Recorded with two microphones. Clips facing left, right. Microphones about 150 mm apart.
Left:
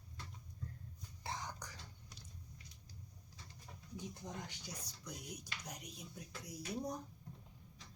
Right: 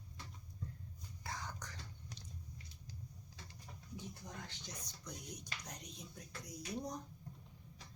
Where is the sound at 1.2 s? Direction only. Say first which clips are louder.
Left 1 dB; 20° left (ahead or behind).